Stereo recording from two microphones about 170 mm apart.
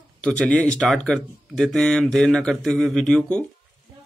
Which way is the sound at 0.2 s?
5° left (ahead or behind).